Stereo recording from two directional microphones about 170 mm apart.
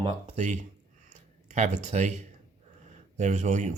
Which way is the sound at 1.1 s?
45° right (ahead or behind).